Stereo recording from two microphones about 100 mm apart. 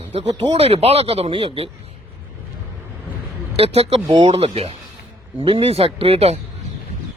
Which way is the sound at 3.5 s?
85° right.